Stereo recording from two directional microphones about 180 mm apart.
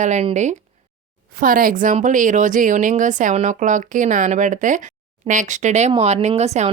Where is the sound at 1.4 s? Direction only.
50° right (ahead or behind).